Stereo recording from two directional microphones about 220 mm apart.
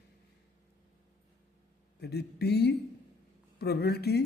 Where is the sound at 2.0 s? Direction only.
50° left (ahead or behind).